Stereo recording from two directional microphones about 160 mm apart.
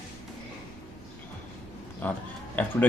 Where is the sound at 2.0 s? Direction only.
10° left (ahead or behind).